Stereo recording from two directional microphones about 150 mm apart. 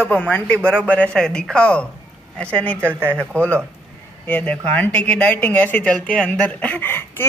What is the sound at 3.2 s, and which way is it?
Speech, 10° left (ahead or behind).